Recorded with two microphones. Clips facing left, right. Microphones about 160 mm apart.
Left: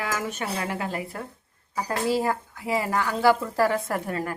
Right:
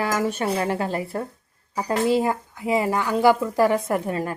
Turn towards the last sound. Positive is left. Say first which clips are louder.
# right 4 dB
turn(degrees=-20)  # may be behind; listen again after turning